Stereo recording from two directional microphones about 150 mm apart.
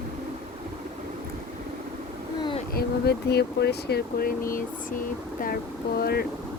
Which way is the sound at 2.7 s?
90° left.